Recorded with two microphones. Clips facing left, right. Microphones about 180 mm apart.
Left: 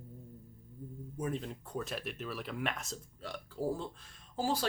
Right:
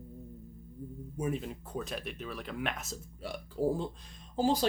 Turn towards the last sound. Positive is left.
turn(degrees=-20)  # may be behind; listen again after turning